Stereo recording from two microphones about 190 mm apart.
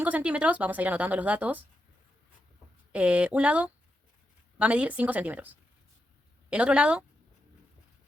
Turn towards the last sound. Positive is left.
turn(degrees=-5)  # may be behind; listen again after turning